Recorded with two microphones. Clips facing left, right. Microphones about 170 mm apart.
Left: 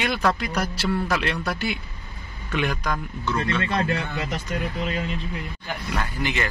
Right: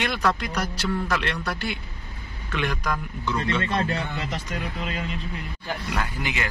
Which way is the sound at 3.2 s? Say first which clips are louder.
Left 1 dB; 20° right (ahead or behind).